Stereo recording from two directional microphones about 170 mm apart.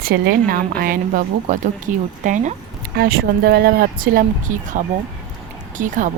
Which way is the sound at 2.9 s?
65° right (ahead or behind).